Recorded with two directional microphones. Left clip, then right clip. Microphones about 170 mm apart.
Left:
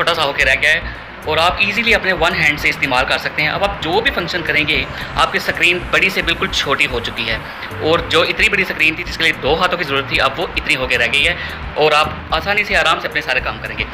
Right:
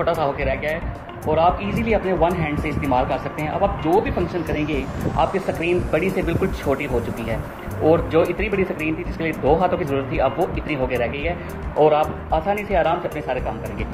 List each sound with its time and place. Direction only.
0.0 s speech: 20° right (ahead or behind)